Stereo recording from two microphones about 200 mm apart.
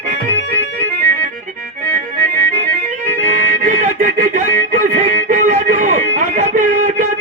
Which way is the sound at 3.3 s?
40° right (ahead or behind).